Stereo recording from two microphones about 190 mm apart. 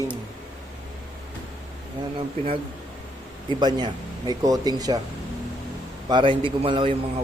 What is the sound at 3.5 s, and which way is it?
Speech, 25° right (ahead or behind).